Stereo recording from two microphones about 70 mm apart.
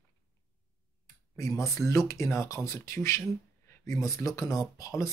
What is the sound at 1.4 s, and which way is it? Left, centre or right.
Speech, left.